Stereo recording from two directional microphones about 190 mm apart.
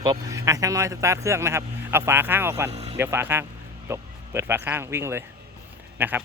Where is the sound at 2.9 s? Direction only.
10° right (ahead or behind).